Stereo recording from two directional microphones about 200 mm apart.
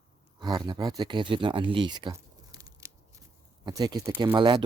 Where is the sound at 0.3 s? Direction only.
20° right (ahead or behind).